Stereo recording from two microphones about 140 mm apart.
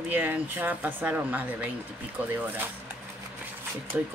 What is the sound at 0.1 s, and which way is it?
Speech, 15° right (ahead or behind).